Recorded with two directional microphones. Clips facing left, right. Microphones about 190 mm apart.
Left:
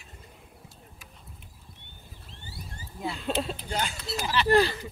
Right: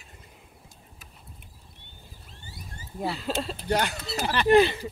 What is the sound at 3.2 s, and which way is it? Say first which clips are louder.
Speech: even; centre (ahead or behind).